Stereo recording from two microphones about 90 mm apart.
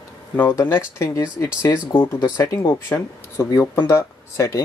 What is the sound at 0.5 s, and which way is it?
Speech, 35° left (ahead or behind).